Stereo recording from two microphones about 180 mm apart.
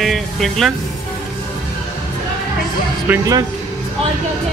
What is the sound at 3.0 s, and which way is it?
Speech, 15° right (ahead or behind).